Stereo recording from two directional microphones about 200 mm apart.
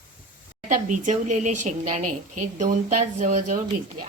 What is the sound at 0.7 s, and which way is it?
A woman's voice, 35° right (ahead or behind).